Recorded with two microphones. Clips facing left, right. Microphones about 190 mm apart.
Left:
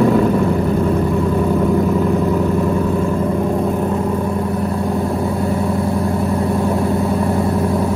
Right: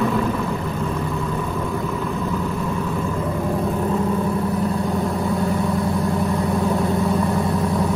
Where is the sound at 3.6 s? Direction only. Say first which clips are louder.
Left 4 dB; 15° left (ahead or behind).